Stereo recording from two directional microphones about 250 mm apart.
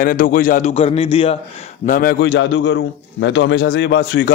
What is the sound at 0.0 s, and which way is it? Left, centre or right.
A man's voice, left.